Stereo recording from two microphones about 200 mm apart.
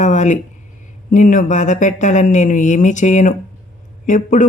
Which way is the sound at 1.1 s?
40° left (ahead or behind).